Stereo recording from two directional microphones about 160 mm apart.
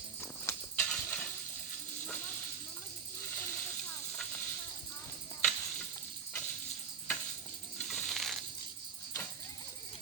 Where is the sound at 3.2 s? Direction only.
15° left (ahead or behind).